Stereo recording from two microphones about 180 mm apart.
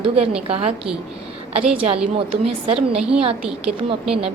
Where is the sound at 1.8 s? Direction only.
35° right (ahead or behind).